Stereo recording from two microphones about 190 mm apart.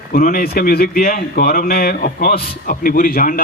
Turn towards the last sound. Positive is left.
turn(degrees=45)  # may be behind; listen again after turning